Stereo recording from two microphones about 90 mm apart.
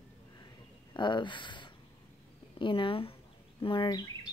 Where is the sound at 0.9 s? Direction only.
60° left (ahead or behind).